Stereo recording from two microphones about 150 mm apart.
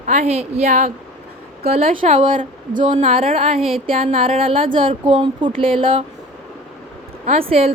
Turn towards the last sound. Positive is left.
turn(degrees=-40)  # may be behind; listen again after turning